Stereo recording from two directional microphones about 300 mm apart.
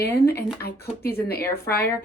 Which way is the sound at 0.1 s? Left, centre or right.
Left.